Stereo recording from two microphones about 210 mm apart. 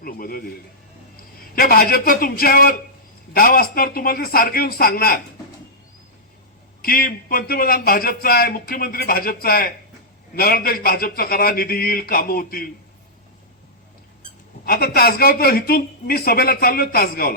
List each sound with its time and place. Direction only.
0.0 s speech: 45° left (ahead or behind)
1.5 s speech: 45° left (ahead or behind)
6.8 s speech: 45° left (ahead or behind)
14.6 s speech: 45° left (ahead or behind)